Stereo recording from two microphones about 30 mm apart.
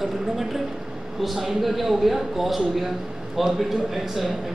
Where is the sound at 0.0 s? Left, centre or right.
Centre.